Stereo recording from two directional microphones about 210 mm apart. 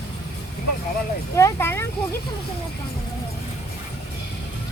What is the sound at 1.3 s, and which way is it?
Speech, 10° left (ahead or behind).